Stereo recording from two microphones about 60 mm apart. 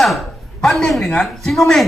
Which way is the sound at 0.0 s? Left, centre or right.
Centre.